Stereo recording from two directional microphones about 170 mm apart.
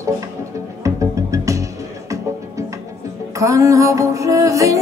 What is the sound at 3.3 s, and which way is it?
Music, 20° right (ahead or behind).